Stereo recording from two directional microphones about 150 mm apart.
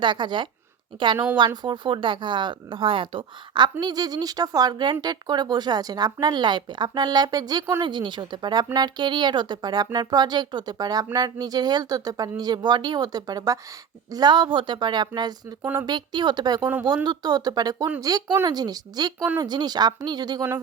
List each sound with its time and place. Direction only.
0.0 s a woman's voice: 30° right (ahead or behind)
15.6 s speech: 10° right (ahead or behind)
15.9 s speech: 30° right (ahead or behind)